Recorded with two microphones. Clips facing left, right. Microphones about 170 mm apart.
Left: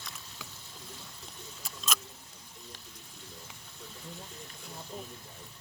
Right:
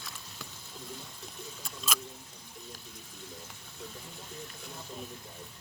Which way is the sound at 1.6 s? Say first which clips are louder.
Even; 10° right (ahead or behind).